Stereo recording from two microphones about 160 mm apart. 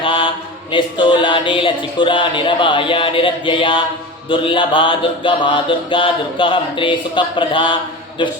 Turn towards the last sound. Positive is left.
turn(degrees=30)  # may be behind; listen again after turning